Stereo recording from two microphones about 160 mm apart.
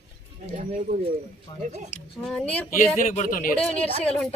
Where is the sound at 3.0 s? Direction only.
55° left (ahead or behind).